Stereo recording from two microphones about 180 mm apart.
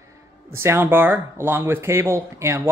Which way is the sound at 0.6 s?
15° right (ahead or behind).